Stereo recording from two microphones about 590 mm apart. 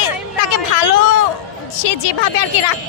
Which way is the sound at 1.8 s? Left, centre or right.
Left.